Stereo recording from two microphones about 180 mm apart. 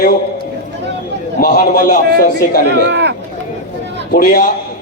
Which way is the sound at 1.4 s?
55° left (ahead or behind).